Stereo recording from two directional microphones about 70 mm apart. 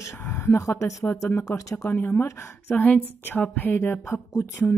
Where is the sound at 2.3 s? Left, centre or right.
Left.